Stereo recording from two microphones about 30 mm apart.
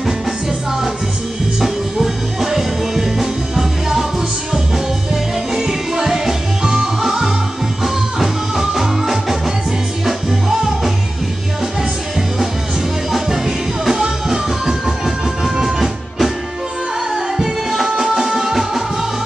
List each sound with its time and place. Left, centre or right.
1.6 s music: centre
5.5 s music: centre
13.8 s music: centre